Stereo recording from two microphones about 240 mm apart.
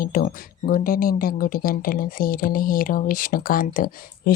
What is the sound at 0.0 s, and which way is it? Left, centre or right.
Speech, left.